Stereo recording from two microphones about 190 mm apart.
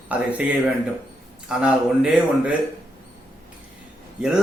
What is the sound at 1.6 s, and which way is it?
Speech, 5° right (ahead or behind).